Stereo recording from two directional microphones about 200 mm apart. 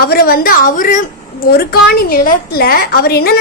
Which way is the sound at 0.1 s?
50° left (ahead or behind).